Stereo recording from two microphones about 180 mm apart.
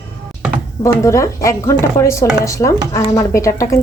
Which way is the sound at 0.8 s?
15° left (ahead or behind).